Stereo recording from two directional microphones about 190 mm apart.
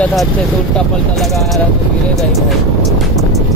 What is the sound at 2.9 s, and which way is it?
Music, centre (ahead or behind).